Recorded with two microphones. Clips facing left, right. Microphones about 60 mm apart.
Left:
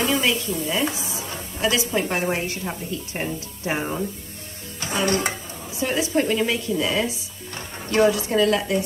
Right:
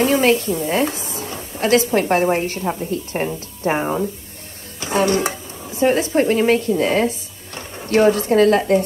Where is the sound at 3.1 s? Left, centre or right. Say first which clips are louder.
Right 6 dB; centre.